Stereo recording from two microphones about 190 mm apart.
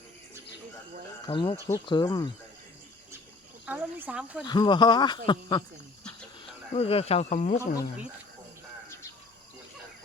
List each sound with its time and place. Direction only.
1.3 s speech: 25° left (ahead or behind)
3.7 s speech: 10° right (ahead or behind)
4.4 s speech: 25° left (ahead or behind)
6.7 s speech: 30° left (ahead or behind)